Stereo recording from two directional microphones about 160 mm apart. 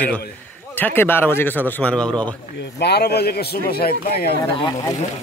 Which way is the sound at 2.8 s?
90° left.